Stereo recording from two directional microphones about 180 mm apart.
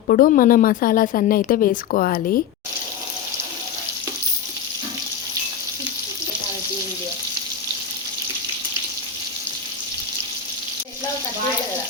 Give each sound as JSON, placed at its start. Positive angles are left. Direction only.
{"t": 0.1, "sound": "a woman's voice", "side_deg": 50}